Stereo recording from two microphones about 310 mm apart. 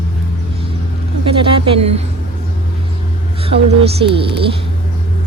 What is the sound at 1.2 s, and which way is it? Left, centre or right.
Speech, centre.